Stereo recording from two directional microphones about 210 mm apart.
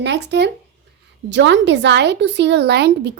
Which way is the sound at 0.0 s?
55° right (ahead or behind).